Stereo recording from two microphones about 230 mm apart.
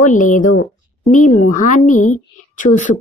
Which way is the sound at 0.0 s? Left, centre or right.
Left.